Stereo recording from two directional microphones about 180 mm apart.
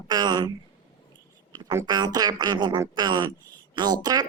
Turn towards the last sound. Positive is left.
turn(degrees=-20)  # may be behind; listen again after turning